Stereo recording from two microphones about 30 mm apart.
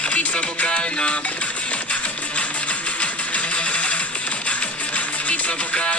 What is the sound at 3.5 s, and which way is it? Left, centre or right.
Music, left.